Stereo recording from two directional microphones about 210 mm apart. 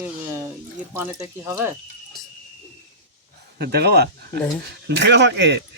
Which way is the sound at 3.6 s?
50° right (ahead or behind).